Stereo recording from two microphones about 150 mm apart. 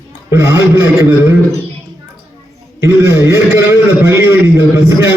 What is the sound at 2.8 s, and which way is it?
A man's voice, 20° right (ahead or behind).